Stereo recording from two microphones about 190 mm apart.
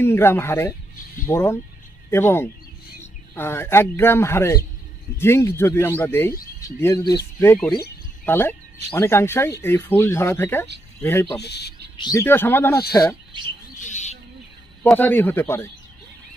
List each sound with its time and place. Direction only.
0.0 s a man's voice: 10° left (ahead or behind)
11.4 s speech: 60° left (ahead or behind)
12.0 s speech: 15° left (ahead or behind)
13.7 s bird: 40° left (ahead or behind)
14.8 s speech: 10° left (ahead or behind)